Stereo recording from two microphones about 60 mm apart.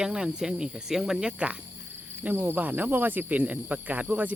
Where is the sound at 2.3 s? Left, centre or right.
Right.